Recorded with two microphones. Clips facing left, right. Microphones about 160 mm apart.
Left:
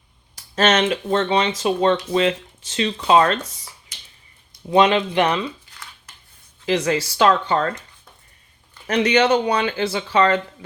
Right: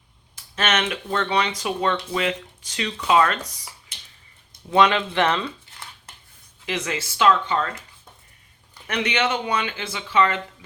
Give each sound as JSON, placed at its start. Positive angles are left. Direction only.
{"t": 0.3, "sound": "speech", "side_deg": 35}
{"t": 4.7, "sound": "speech", "side_deg": 20}
{"t": 6.7, "sound": "speech", "side_deg": 35}
{"t": 8.9, "sound": "speech", "side_deg": 35}